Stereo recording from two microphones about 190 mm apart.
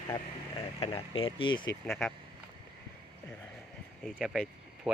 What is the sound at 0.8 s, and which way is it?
Speech, 30° left (ahead or behind).